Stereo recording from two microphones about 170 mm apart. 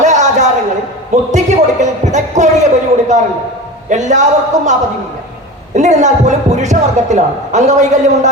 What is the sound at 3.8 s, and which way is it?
A man's voice, 45° right (ahead or behind).